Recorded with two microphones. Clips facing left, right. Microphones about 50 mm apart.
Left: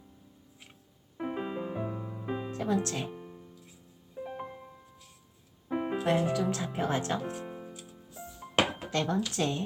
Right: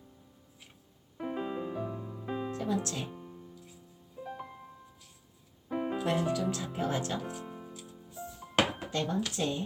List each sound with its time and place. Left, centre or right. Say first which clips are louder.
1.2 s music: left 1 dB; centre
2.2 s music: even; centre
2.6 s speech: left 6 dB; left
4.2 s music: left 3 dB; centre
5.6 s music: left 1 dB; centre
6.1 s speech: left 3 dB; left
7.4 s music: left 2 dB; centre
8.9 s speech: left 2 dB; left